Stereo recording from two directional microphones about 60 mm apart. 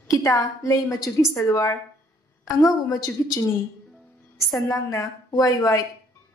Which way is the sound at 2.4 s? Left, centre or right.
Left.